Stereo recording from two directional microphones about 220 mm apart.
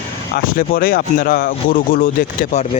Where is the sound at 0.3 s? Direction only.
40° left (ahead or behind).